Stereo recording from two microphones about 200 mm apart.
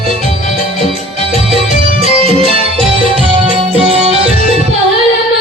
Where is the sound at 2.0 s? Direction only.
30° right (ahead or behind).